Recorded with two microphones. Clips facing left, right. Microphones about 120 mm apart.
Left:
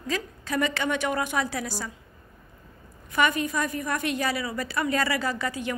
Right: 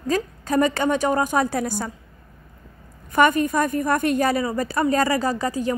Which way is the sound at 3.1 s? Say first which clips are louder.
Right 7 dB; 45° right (ahead or behind).